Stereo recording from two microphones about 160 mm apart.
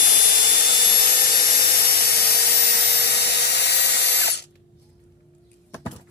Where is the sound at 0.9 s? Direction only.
75° left (ahead or behind); by 4.5 s 90° left.